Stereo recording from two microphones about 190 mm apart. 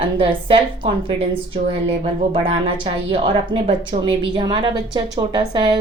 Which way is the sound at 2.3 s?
30° right (ahead or behind).